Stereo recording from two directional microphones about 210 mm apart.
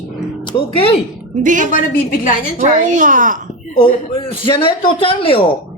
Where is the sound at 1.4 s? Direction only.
35° right (ahead or behind).